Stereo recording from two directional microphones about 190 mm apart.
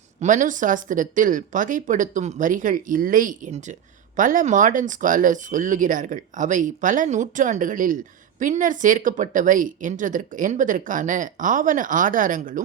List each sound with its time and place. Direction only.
0.2 s speech: 40° right (ahead or behind)